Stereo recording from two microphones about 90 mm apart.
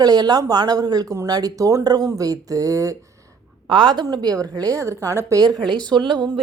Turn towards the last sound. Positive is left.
turn(degrees=-60)  # may be behind; listen again after turning